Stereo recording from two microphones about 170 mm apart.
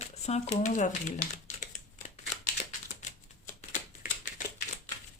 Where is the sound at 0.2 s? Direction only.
40° left (ahead or behind).